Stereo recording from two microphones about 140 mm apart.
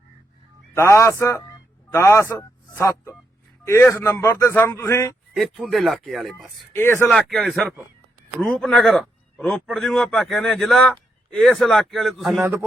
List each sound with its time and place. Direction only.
0.8 s speech: 20° left (ahead or behind)
5.3 s a man's voice: centre (ahead or behind)
6.7 s speech: 15° left (ahead or behind)
7.1 s a man's voice: 5° left (ahead or behind)
12.4 s a man's voice: 15° right (ahead or behind)